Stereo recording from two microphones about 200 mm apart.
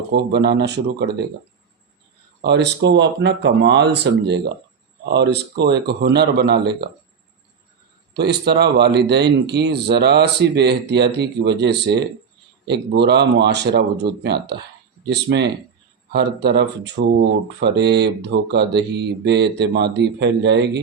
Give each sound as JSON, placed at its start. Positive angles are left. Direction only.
{"t": 0.1, "sound": "speech", "side_deg": -55}
{"t": 2.4, "sound": "speech", "side_deg": -60}
{"t": 8.1, "sound": "speech", "side_deg": -55}